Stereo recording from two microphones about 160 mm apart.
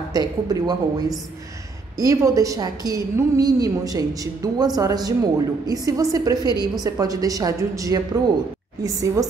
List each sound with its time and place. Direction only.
0.1 s a woman's voice: 25° right (ahead or behind)